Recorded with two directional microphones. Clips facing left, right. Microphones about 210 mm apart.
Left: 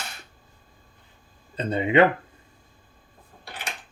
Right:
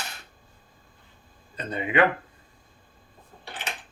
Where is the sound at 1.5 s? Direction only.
25° left (ahead or behind).